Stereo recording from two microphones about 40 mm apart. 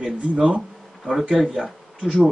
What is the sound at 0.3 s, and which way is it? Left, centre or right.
Speech, right.